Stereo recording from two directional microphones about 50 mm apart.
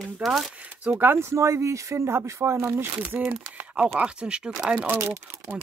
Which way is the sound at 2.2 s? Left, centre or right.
Right.